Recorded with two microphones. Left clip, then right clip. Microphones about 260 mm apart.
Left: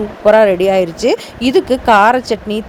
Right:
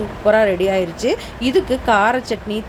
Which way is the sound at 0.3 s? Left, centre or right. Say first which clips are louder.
Left 6 dB; left.